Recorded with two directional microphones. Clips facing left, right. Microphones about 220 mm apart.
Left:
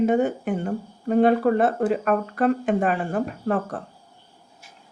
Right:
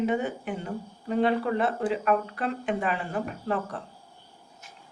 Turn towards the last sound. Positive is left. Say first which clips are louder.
# left 5 dB
turn(degrees=50)  # may be behind; listen again after turning